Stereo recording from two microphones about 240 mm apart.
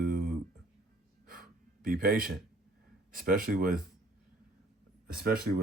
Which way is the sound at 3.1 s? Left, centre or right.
Right.